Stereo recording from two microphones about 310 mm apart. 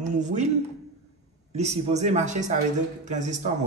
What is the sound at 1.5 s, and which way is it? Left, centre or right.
Speech, right.